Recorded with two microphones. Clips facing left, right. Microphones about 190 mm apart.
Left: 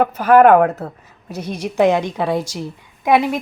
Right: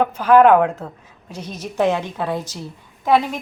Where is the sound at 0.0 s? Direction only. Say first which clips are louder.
Left 2 dB; 10° left (ahead or behind).